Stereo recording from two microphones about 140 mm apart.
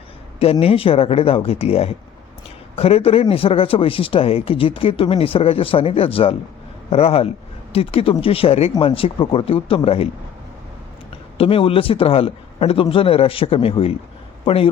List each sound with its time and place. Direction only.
0.6 s speech: 40° left (ahead or behind)
11.3 s a man's voice: 40° left (ahead or behind)